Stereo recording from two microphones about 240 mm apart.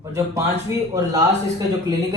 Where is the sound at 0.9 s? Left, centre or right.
Centre.